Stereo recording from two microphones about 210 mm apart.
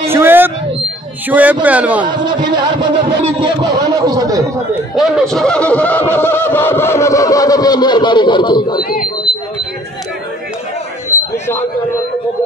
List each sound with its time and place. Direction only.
0.1 s a sound: 10° right (ahead or behind)
1.3 s speech: 10° right (ahead or behind)
2.0 s a man's voice: 20° right (ahead or behind)
4.9 s speech: centre (ahead or behind); by 8.8 s 20° left (ahead or behind)